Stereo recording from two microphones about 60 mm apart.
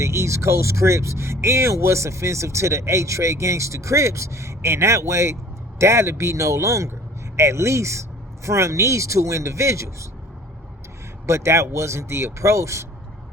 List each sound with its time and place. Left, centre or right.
0.0 s speech: right
11.3 s speech: right